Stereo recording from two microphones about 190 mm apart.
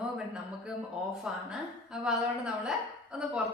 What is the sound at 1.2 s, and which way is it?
A woman's voice, 5° right (ahead or behind).